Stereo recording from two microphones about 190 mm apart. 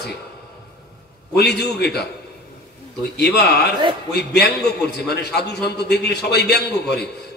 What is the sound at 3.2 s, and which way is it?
A man's voice, 60° left (ahead or behind).